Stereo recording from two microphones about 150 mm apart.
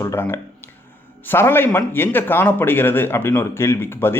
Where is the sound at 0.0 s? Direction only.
15° left (ahead or behind).